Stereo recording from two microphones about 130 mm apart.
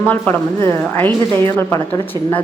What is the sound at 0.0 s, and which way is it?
A woman's voice, 15° left (ahead or behind).